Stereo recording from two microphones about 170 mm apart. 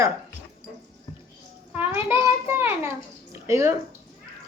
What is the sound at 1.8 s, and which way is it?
A child's voice, 15° right (ahead or behind).